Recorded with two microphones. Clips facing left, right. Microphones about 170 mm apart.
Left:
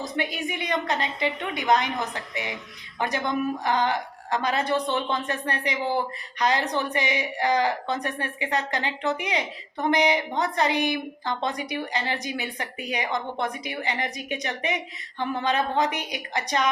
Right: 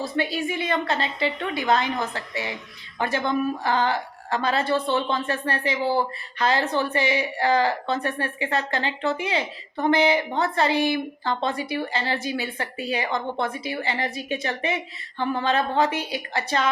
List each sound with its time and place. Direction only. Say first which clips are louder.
0.2 s a woman's voice: right 4 dB; 20° left (ahead or behind)